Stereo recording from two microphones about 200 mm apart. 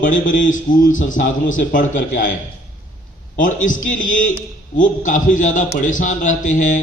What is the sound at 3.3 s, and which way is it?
A man's voice, 40° left (ahead or behind).